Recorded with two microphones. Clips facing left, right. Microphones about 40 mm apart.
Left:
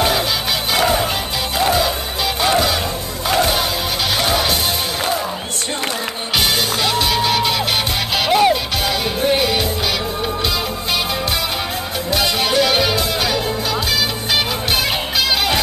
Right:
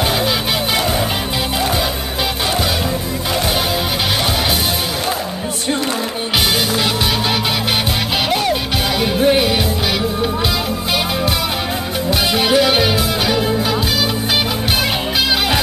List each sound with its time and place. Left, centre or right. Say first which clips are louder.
0.0 s music: even; centre
3.3 s music: left 3 dB; centre
6.8 s music: even; centre
8.3 s music: left 6 dB; centre
9.0 s music: right 5 dB; centre
12.1 s music: right 3 dB; centre